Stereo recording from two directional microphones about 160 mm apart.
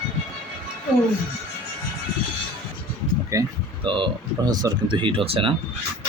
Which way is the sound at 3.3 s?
20° right (ahead or behind).